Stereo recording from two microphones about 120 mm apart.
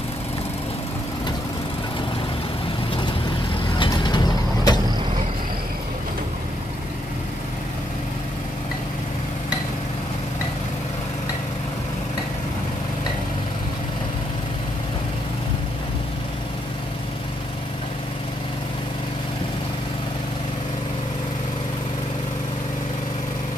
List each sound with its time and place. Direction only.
3.7 s mechanisms: 40° left (ahead or behind)